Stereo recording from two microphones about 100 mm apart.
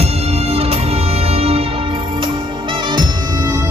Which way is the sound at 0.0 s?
90° right.